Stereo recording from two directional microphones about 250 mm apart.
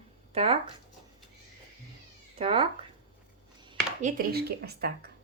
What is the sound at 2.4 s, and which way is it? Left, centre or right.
Speech, right.